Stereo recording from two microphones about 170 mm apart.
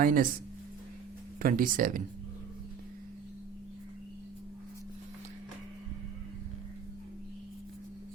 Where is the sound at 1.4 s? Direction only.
55° right (ahead or behind).